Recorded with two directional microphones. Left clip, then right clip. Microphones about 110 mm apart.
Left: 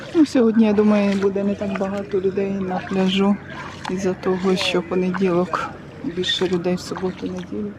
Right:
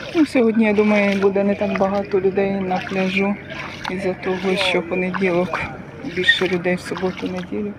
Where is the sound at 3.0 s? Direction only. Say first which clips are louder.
Even; 60° left (ahead or behind); by 7.7 s 30° left (ahead or behind).